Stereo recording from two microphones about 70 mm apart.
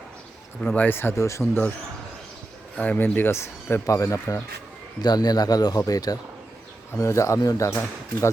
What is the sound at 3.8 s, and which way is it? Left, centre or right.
Speech, left.